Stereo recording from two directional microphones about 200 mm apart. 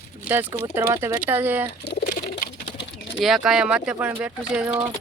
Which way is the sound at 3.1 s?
Centre (ahead or behind).